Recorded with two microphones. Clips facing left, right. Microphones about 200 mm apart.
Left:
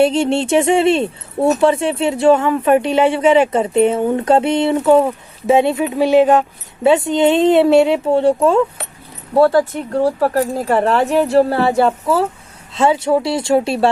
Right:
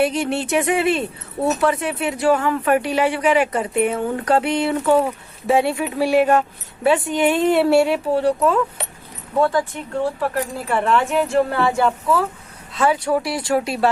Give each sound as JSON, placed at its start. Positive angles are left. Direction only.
{"t": 0.0, "sound": "speech", "side_deg": 25}